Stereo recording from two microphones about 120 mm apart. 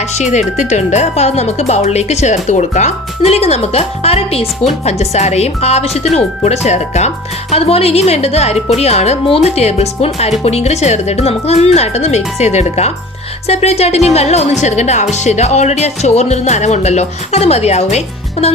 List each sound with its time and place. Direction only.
0.2 s speech: 75° left (ahead or behind)
7.5 s a woman's voice: 55° left (ahead or behind)